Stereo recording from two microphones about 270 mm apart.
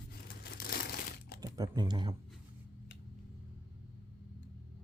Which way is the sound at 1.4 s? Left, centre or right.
Centre.